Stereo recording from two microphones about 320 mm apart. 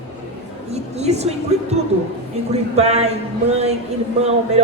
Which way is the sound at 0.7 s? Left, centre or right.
Centre.